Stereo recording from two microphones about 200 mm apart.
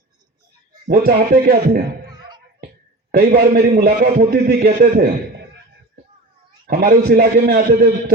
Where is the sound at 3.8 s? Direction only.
45° right (ahead or behind).